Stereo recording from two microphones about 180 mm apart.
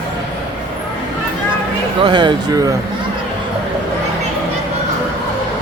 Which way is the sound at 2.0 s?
25° right (ahead or behind).